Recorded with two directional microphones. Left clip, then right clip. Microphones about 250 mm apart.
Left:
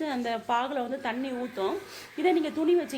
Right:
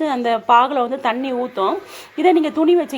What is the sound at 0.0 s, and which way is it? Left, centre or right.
A woman's voice, centre.